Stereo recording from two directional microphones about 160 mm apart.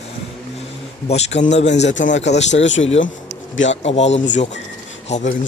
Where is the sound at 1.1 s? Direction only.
45° left (ahead or behind).